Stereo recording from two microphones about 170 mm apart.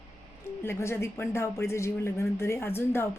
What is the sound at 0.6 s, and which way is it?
Speech, 15° left (ahead or behind).